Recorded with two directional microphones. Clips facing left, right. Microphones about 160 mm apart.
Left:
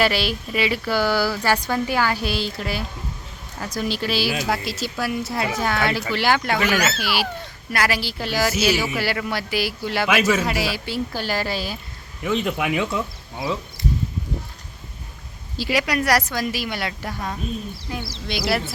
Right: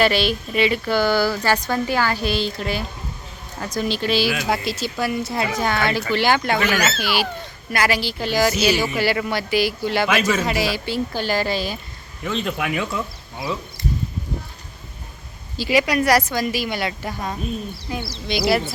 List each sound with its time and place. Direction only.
0.0 s a woman's voice: 5° left (ahead or behind)
15.5 s a child's voice: centre (ahead or behind)